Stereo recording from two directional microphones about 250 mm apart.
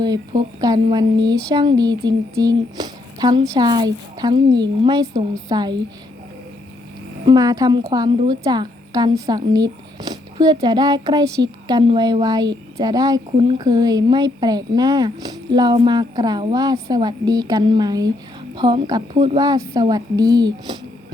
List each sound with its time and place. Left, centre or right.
0.6 s a woman's voice: centre
7.3 s a woman's voice: centre